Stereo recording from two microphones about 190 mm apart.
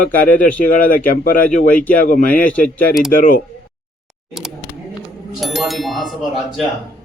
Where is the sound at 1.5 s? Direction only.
5° left (ahead or behind).